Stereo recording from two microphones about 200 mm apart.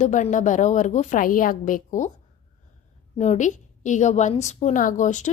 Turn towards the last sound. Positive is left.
turn(degrees=40)  # may be behind; listen again after turning